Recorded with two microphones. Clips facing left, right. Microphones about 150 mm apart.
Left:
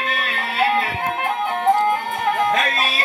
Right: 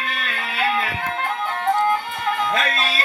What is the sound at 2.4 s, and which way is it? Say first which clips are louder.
Music: left 2 dB; 50° left (ahead or behind).